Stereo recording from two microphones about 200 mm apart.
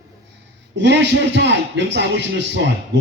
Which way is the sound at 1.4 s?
60° right (ahead or behind).